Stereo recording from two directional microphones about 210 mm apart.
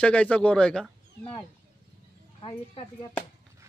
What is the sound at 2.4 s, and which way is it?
Speech, 25° left (ahead or behind).